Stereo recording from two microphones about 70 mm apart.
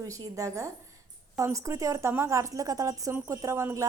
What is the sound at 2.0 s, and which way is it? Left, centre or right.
Speech, right.